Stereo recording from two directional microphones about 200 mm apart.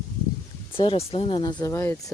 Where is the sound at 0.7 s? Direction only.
25° left (ahead or behind).